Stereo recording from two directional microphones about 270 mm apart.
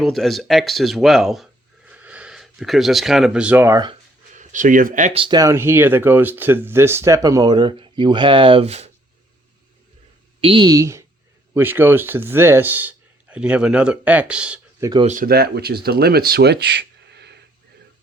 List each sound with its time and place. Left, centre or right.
0.0 s speech: centre
4.4 s speech: right
10.4 s speech: centre
15.0 s speech: right